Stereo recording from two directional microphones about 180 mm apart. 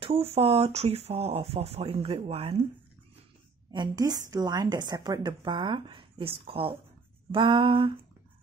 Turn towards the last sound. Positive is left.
turn(degrees=-30)  # may be behind; listen again after turning